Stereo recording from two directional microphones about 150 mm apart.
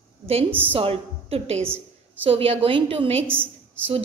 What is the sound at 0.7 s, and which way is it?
A woman's voice, 40° right (ahead or behind).